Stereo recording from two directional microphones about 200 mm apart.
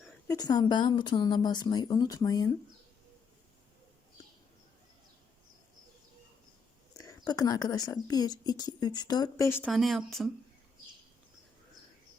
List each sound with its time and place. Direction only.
0.3 s speech: 20° left (ahead or behind)
7.0 s speech: 20° left (ahead or behind)
9.6 s speech: centre (ahead or behind)